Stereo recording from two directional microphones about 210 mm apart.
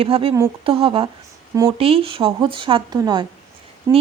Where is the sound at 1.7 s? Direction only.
25° right (ahead or behind).